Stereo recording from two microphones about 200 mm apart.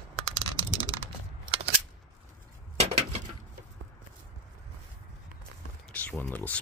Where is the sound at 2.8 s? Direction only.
30° right (ahead or behind).